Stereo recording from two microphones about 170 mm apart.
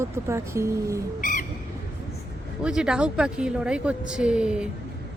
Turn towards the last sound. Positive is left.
turn(degrees=-5)  # may be behind; listen again after turning